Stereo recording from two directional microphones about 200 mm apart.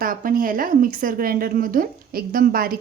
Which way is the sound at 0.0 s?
45° right (ahead or behind).